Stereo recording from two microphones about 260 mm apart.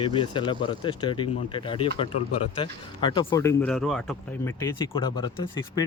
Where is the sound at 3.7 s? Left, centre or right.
Centre.